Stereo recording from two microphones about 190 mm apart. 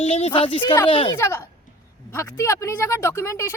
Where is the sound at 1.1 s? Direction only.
15° left (ahead or behind).